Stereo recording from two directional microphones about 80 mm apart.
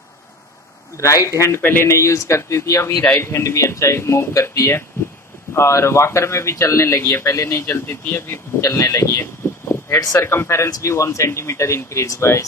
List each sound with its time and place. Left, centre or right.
0.9 s speech: left
1.6 s speech: left
1.9 s speech: left
7.6 s speech: left
7.9 s speech: left